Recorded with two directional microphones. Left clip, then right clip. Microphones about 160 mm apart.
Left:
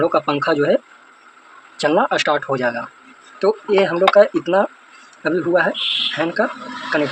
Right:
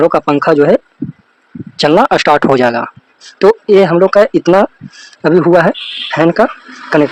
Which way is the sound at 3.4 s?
90° right.